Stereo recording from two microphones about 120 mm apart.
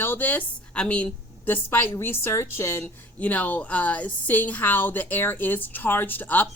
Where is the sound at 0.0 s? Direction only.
15° left (ahead or behind).